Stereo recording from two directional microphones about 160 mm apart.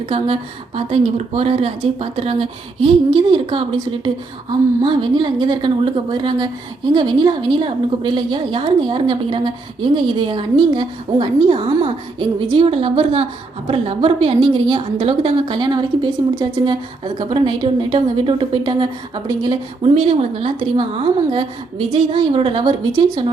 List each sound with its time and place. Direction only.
0.1 s a woman's voice: 35° right (ahead or behind)